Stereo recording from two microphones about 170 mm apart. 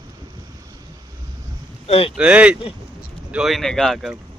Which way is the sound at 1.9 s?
35° left (ahead or behind).